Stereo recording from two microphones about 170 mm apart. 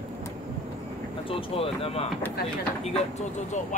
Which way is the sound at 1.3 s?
35° left (ahead or behind).